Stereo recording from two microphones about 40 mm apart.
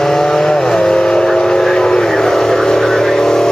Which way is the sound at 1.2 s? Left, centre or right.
Centre.